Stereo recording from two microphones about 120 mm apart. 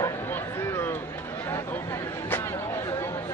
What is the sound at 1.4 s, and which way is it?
Chatter, 20° left (ahead or behind).